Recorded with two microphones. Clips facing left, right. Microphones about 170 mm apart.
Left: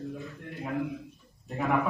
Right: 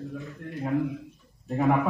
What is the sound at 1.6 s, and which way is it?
Speech, 20° right (ahead or behind).